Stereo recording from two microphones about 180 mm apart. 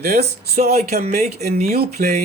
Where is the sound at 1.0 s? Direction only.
40° right (ahead or behind).